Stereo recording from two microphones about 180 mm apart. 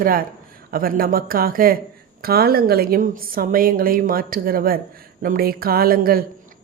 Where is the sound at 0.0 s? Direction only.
50° right (ahead or behind).